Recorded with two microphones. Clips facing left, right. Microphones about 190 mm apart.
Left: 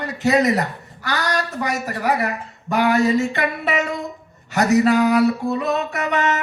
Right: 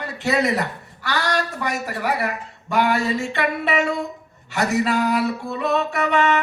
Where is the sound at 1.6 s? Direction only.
40° left (ahead or behind).